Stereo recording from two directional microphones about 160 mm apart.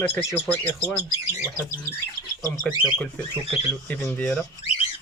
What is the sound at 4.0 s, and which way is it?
Speech, 10° left (ahead or behind).